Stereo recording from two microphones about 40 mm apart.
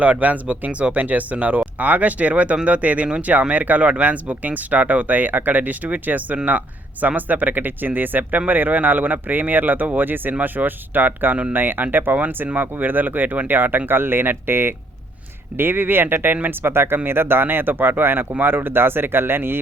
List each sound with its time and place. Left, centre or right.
0.0 s speech: right
13.6 s speech: right